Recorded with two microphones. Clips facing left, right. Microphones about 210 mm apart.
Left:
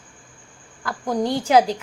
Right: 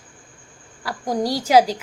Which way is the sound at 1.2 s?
10° right (ahead or behind).